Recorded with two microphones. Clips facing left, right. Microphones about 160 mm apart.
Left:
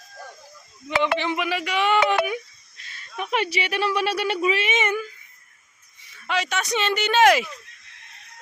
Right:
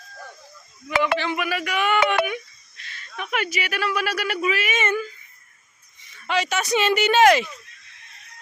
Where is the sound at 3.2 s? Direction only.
30° left (ahead or behind).